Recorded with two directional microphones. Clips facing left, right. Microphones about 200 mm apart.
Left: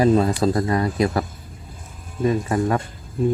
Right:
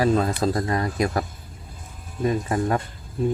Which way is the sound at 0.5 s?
30° left (ahead or behind).